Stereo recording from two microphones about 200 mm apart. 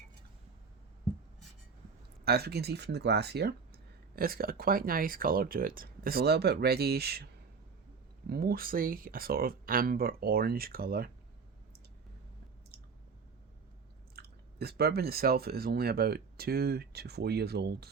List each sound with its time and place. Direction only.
2.2 s speech: 50° right (ahead or behind)
8.3 s speech: 50° right (ahead or behind)
14.2 s speech: 50° right (ahead or behind)